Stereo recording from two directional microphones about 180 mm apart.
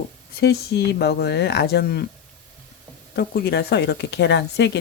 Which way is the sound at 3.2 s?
60° left (ahead or behind).